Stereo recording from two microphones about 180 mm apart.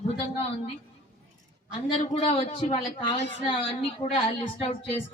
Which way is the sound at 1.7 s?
30° left (ahead or behind).